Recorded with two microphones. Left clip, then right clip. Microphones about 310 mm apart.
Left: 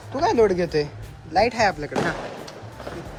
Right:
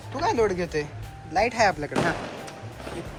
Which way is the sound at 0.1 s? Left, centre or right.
Centre.